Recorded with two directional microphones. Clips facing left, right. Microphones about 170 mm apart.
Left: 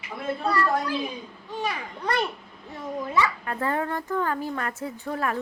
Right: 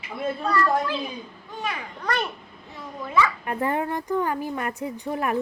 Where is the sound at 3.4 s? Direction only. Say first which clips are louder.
Right 2 dB; 20° right (ahead or behind).